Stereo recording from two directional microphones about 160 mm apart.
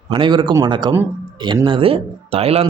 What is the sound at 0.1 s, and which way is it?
Speech, 30° right (ahead or behind).